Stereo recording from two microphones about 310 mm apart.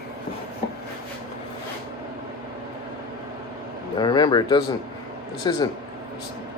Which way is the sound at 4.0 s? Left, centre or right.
Centre.